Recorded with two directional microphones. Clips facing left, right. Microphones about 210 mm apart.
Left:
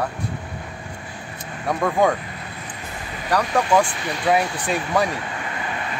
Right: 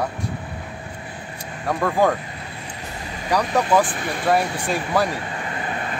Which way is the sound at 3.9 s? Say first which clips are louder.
Right 1 dB; 50° right (ahead or behind).